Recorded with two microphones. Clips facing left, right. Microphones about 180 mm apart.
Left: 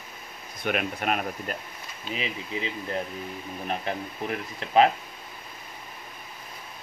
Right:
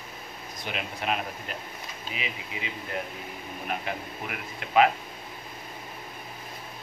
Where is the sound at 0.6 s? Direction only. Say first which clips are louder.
Left 4 dB; 55° left (ahead or behind).